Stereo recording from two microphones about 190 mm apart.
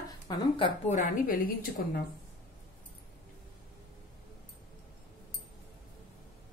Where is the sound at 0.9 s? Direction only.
45° left (ahead or behind).